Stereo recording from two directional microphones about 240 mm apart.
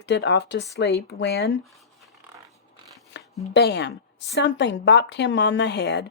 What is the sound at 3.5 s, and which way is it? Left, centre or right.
Speech, left.